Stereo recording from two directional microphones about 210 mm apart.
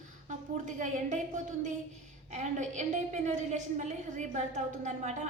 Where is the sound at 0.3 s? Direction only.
35° right (ahead or behind).